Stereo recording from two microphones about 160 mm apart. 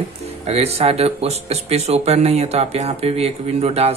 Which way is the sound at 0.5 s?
40° right (ahead or behind).